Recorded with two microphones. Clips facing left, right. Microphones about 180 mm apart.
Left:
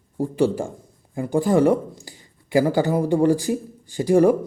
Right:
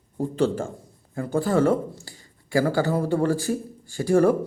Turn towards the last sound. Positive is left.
turn(degrees=15)  # may be behind; listen again after turning